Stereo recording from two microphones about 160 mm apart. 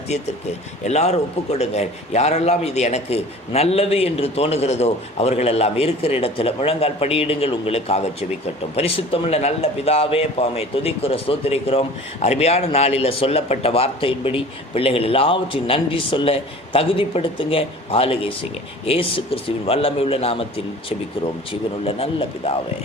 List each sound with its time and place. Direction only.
0.1 s a man's voice: 45° left (ahead or behind)
21.5 s a man's voice: 35° left (ahead or behind)